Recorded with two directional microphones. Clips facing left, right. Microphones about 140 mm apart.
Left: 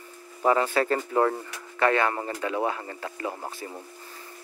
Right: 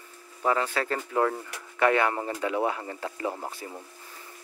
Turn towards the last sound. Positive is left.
turn(degrees=-5)  # may be behind; listen again after turning